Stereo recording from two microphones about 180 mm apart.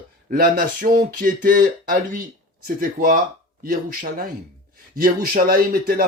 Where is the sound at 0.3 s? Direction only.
50° right (ahead or behind).